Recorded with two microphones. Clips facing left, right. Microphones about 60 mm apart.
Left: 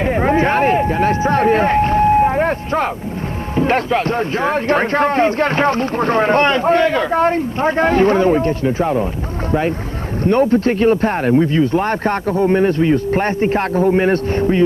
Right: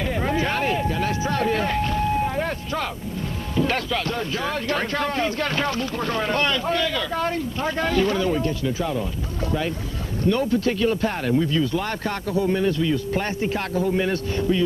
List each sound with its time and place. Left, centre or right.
0.0 s a sound: left
3.5 s a man's voice: left
10.2 s a man's voice: left